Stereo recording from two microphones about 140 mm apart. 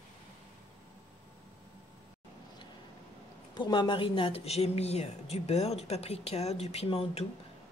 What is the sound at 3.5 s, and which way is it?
A woman's voice, 35° left (ahead or behind).